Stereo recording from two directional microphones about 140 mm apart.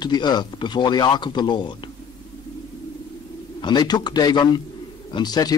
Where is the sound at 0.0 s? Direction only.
30° left (ahead or behind).